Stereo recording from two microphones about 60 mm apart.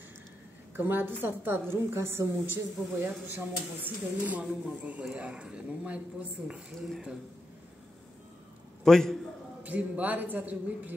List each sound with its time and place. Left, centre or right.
0.7 s a woman's voice: right
1.7 s a woman's voice: right; by 6.6 s centre
6.8 s speech: centre
8.8 s a man's voice: centre
9.6 s a man's voice: right